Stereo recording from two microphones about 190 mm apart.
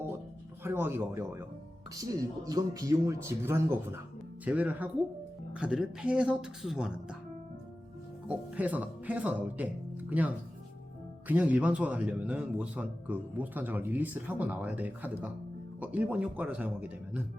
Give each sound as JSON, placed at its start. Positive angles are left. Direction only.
{"t": 0.6, "sound": "a man's voice", "side_deg": -10}
{"t": 8.3, "sound": "a man's voice", "side_deg": -10}